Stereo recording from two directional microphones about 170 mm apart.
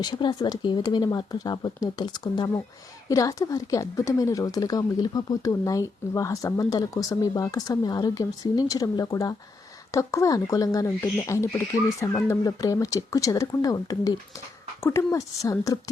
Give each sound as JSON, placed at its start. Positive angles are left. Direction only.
{"t": 0.0, "sound": "speech", "side_deg": 25}